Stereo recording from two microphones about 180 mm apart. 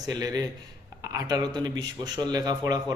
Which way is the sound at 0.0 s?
20° right (ahead or behind).